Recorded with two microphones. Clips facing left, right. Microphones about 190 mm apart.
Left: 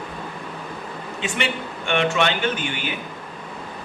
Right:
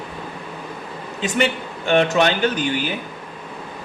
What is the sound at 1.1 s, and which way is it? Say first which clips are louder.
A man's voice: right 6 dB; 40° right (ahead or behind).